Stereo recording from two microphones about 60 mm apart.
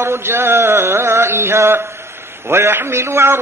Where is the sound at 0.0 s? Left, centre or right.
Right.